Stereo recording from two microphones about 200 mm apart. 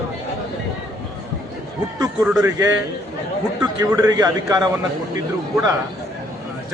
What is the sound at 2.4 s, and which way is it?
A man's voice, 15° right (ahead or behind).